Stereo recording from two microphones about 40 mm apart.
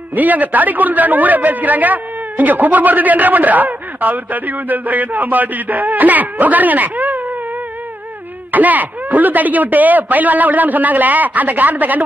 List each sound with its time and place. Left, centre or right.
0.1 s a man's voice: right
8.5 s a man's voice: right